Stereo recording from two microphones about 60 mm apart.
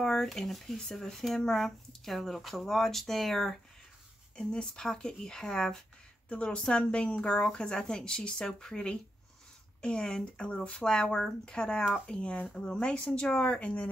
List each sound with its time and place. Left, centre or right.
0.0 s speech: centre